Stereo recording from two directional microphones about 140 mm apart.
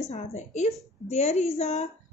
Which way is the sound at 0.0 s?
55° left (ahead or behind).